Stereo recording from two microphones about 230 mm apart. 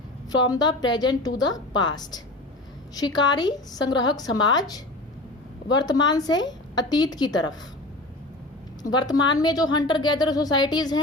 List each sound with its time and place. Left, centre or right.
0.3 s a woman's voice: centre
8.9 s a woman's voice: centre